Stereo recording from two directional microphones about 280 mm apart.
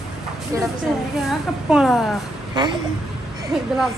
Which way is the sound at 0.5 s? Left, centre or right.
Centre.